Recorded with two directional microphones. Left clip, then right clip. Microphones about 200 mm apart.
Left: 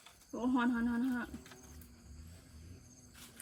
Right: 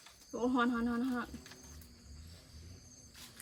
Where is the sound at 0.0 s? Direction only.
10° right (ahead or behind).